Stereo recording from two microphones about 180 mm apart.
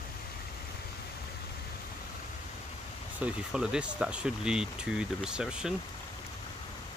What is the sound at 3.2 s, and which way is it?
Speech, 5° right (ahead or behind).